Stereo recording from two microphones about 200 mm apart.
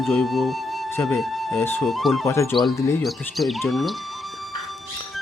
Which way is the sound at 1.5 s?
10° left (ahead or behind).